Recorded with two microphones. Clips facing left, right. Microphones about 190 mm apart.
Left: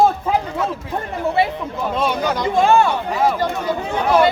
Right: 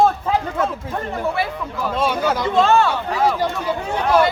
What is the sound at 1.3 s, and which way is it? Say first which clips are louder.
Speech: left 4 dB; 20° left (ahead or behind).